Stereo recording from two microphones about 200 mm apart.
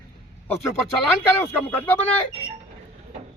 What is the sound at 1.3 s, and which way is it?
Speech, 10° left (ahead or behind).